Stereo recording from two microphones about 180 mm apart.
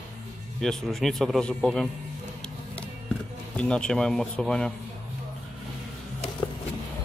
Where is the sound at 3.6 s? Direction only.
5° left (ahead or behind).